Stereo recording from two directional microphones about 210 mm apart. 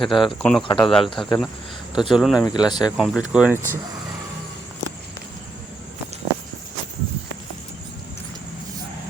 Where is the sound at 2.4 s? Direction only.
20° left (ahead or behind).